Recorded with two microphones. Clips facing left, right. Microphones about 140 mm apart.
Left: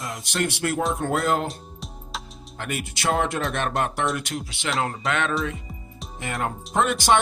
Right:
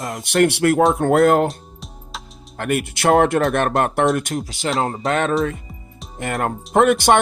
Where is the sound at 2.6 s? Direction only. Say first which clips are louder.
Right 9 dB; 55° right (ahead or behind); by 5.3 s 35° right (ahead or behind).